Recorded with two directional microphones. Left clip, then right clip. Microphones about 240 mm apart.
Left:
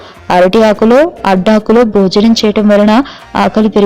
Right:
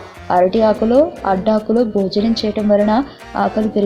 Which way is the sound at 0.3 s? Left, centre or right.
Left.